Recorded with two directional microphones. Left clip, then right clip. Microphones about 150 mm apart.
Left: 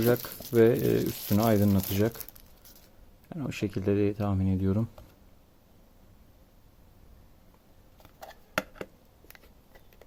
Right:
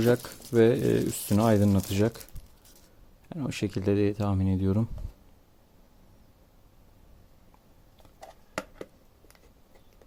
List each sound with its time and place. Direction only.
0.2 s speech: 5° right (ahead or behind)
3.2 s speech: 15° right (ahead or behind)